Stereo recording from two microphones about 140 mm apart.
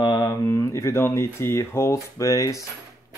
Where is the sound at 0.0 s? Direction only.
30° left (ahead or behind).